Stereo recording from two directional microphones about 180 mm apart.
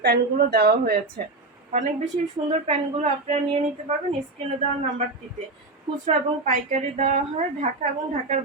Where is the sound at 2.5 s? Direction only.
35° right (ahead or behind).